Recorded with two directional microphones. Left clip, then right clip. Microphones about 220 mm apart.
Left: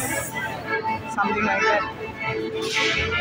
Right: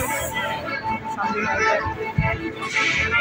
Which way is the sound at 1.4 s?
50° right (ahead or behind).